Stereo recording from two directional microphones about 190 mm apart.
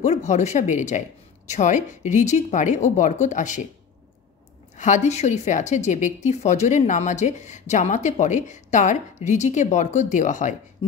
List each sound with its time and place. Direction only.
0.0 s speech: 40° left (ahead or behind)
4.7 s speech: 40° left (ahead or behind)